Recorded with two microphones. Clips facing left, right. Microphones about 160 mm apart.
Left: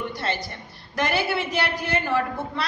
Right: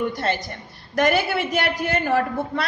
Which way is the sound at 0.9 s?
50° right (ahead or behind).